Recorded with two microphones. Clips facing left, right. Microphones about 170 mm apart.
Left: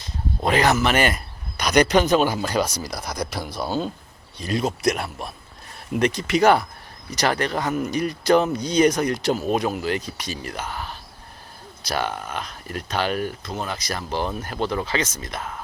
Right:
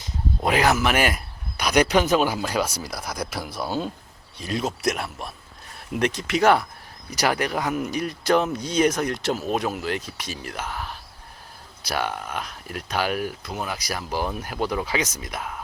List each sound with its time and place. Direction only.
0.0 s speech: 5° right (ahead or behind)